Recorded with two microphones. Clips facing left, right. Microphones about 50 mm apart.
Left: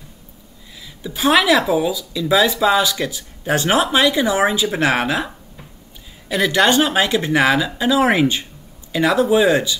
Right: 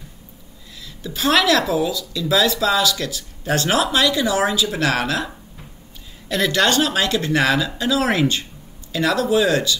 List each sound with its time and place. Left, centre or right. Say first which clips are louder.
0.8 s speech: left 3 dB; centre